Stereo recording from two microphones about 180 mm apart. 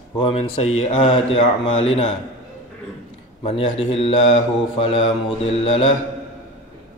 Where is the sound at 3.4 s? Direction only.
35° left (ahead or behind).